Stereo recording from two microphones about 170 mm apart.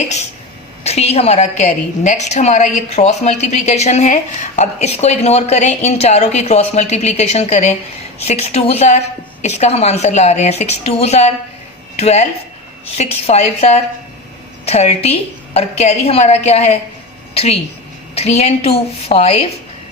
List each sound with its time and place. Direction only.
0.9 s a woman's voice: 40° left (ahead or behind)